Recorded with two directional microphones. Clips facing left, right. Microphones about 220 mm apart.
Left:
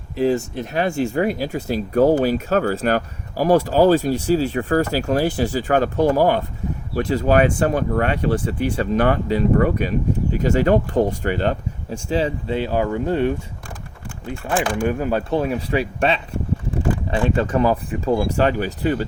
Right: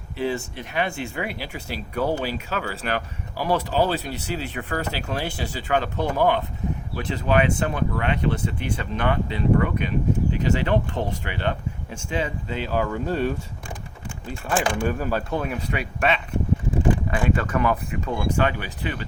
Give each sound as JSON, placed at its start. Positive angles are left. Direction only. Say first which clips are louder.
{"t": 0.2, "sound": "speech", "louder": "left 7 dB", "side_deg": 40}
{"t": 12.7, "sound": "speech", "louder": "left 2 dB", "side_deg": 20}
{"t": 14.8, "sound": "speech", "louder": "left 4 dB", "side_deg": 20}